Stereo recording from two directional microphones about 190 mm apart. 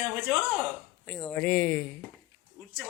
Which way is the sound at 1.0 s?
5° left (ahead or behind).